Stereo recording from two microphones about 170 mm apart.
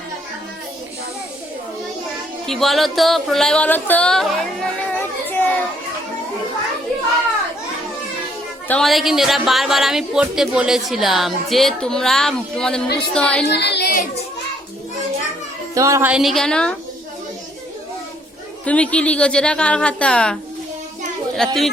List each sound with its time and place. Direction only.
2.5 s speech: centre (ahead or behind)
4.9 s child singing: 10° left (ahead or behind)
8.6 s a woman's voice: 5° left (ahead or behind)
13.5 s speech: 80° left
15.7 s speech: 20° right (ahead or behind); by 16.7 s 5° left (ahead or behind)
18.6 s a woman's voice: 5° left (ahead or behind)